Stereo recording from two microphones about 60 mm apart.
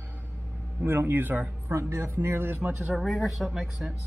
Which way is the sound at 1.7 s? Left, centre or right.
Right.